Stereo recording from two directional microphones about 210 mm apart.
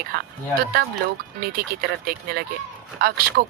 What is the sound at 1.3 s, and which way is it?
A woman's voice, 45° right (ahead or behind).